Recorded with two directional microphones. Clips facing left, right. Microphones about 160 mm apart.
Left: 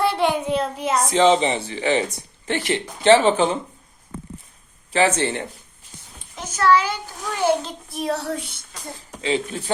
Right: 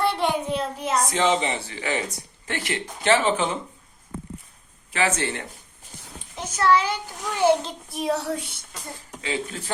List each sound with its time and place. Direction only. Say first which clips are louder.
0.0 s a child's voice: left 3 dB; 5° left (ahead or behind)
1.1 s speech: left 9 dB; 25° left (ahead or behind)
4.9 s speech: left 5 dB; 30° left (ahead or behind)
6.3 s a child's voice: left 2 dB; 25° right (ahead or behind)
9.2 s speech: left 6 dB; 25° left (ahead or behind)